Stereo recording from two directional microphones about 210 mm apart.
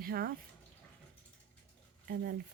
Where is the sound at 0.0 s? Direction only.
45° right (ahead or behind).